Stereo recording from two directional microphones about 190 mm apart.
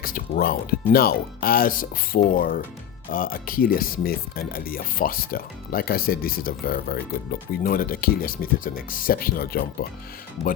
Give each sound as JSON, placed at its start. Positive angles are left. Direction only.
{"t": 0.0, "sound": "speech", "side_deg": 50}